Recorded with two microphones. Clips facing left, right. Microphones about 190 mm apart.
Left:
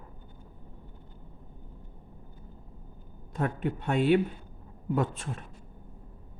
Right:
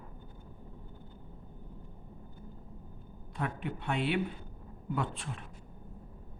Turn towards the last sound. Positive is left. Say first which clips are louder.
# left 6 dB
turn(degrees=45)  # may be behind; listen again after turning